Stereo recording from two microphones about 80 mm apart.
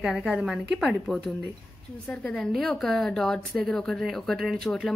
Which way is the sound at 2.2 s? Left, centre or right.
Centre.